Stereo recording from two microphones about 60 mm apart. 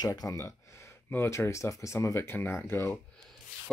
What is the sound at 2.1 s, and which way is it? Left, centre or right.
Speech, left.